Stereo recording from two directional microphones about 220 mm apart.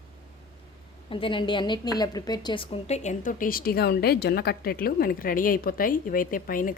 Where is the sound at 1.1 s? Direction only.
25° left (ahead or behind).